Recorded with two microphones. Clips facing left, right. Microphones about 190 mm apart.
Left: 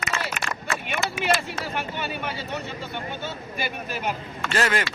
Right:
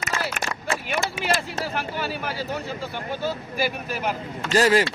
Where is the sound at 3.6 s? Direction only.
Centre (ahead or behind).